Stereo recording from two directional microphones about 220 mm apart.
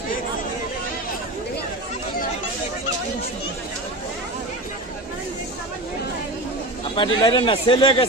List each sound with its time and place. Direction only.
7.0 s speech: 20° left (ahead or behind)